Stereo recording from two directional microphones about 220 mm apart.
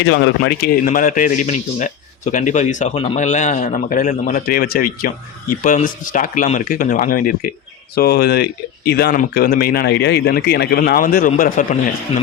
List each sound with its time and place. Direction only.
0.0 s speech: 50° left (ahead or behind)
0.9 s a man's voice: 40° left (ahead or behind)